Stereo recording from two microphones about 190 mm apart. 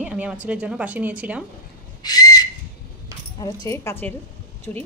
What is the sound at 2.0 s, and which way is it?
Whistle, 20° left (ahead or behind).